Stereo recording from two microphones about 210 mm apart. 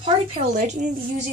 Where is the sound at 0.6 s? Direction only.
35° right (ahead or behind).